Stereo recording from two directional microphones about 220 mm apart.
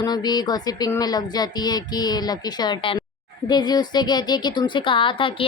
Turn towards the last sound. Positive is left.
turn(degrees=25)  # may be behind; listen again after turning